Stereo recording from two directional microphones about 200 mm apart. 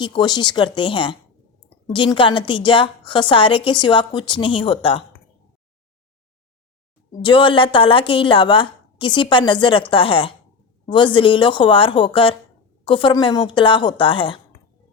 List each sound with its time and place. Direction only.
0.0 s a woman's voice: 20° left (ahead or behind)
7.2 s a woman's voice: 25° left (ahead or behind)